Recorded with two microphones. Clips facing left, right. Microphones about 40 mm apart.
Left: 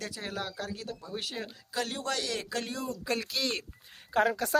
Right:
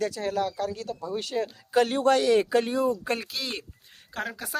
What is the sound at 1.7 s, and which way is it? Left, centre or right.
Speech, right.